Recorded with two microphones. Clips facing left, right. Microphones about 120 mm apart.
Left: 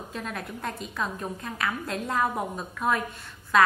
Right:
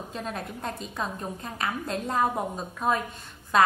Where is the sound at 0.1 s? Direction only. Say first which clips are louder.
Even; 25° right (ahead or behind).